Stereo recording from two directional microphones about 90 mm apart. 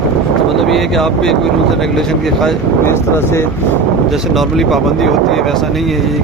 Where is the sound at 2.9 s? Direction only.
30° left (ahead or behind).